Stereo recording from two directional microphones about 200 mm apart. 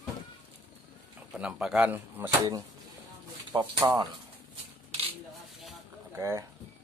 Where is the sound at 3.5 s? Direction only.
20° right (ahead or behind).